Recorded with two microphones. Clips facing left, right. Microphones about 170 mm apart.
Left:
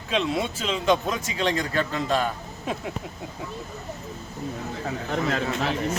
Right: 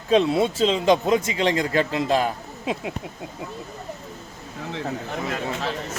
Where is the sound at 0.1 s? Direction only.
30° right (ahead or behind).